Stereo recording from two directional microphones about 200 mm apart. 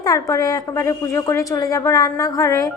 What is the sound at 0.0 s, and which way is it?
A woman's voice, 15° left (ahead or behind).